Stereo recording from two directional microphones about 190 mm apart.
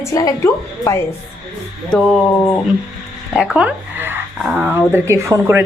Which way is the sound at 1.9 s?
5° left (ahead or behind).